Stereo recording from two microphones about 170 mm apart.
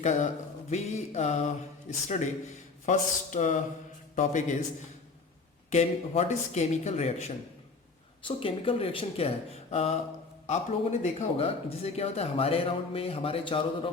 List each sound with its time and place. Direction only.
0.0 s speech: 45° left (ahead or behind)
5.7 s speech: 40° left (ahead or behind)